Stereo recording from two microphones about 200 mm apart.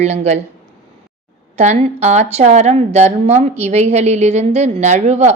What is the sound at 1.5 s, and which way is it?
A woman's voice, 35° right (ahead or behind).